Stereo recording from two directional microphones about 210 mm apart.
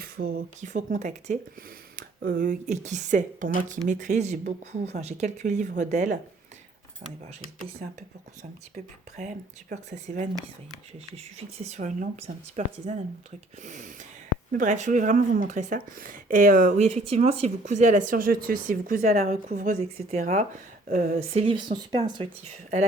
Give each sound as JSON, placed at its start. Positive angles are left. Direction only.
{"t": 0.0, "sound": "speech", "side_deg": -45}
{"t": 9.6, "sound": "speech", "side_deg": -40}
{"t": 21.3, "sound": "speech", "side_deg": -25}